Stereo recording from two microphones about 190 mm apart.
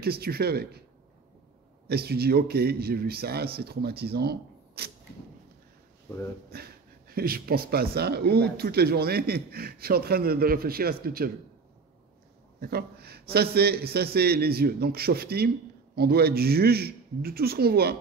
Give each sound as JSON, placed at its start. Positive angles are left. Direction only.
{"t": 0.0, "sound": "a man's voice", "side_deg": -55}
{"t": 1.9, "sound": "a man's voice", "side_deg": -55}
{"t": 6.5, "sound": "speech", "side_deg": -55}
{"t": 12.5, "sound": "a man's voice", "side_deg": -55}